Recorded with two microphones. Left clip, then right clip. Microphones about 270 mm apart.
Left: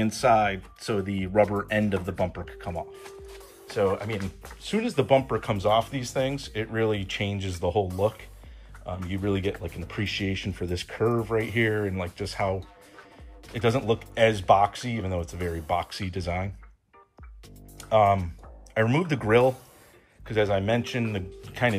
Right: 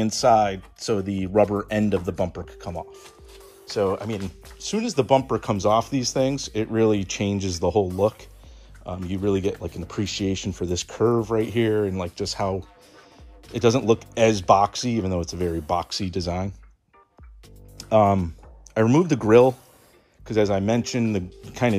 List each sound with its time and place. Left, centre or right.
0.1 s speech: centre
2.7 s speech: right
3.6 s speech: centre
8.8 s speech: centre
17.7 s speech: right